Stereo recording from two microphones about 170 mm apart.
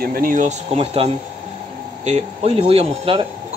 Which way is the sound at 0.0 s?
60° right (ahead or behind).